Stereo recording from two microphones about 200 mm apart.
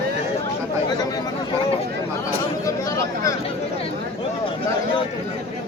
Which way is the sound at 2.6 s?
15° left (ahead or behind).